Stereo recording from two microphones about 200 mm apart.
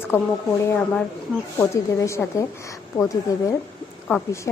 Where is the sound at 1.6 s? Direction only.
15° left (ahead or behind).